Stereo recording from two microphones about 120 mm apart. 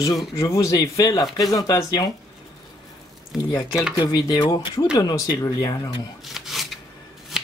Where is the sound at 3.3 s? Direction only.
5° right (ahead or behind).